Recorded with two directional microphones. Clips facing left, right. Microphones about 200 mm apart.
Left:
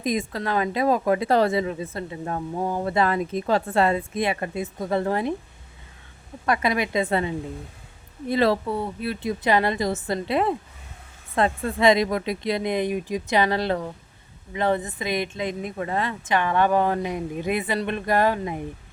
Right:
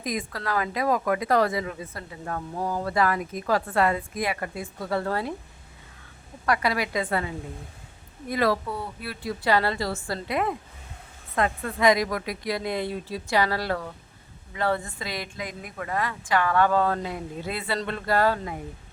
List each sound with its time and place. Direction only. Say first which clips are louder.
0.0 s speech: left 5 dB; 25° left (ahead or behind)
6.4 s speech: left 2 dB; 20° left (ahead or behind)